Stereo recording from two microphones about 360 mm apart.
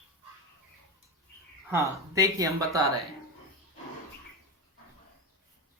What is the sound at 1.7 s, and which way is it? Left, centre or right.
Speech, centre.